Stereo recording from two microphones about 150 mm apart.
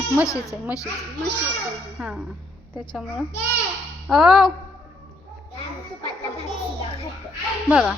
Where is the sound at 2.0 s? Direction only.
10° right (ahead or behind).